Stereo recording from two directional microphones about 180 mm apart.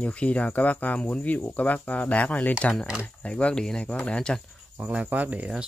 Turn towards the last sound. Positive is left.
turn(degrees=-5)  # may be behind; listen again after turning